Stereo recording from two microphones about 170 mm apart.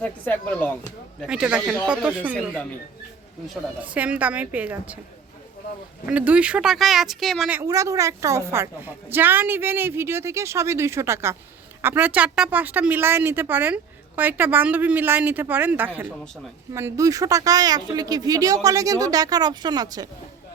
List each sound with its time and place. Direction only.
0.0 s speech: 10° left (ahead or behind)
1.3 s a woman's voice: 5° right (ahead or behind)
3.5 s a woman's voice: 10° right (ahead or behind)
6.1 s speech: 10° right (ahead or behind)
7.5 s a woman's voice: 15° right (ahead or behind)